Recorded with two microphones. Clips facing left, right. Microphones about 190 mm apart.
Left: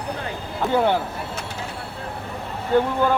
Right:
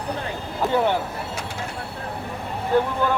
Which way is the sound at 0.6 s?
Centre (ahead or behind).